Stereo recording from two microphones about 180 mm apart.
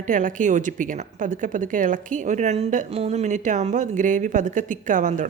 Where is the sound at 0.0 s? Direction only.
45° right (ahead or behind).